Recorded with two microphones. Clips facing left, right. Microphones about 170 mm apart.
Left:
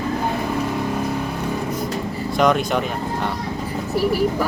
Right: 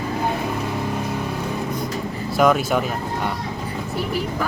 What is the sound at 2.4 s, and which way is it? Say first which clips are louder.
Speech: right 1 dB; 5° right (ahead or behind).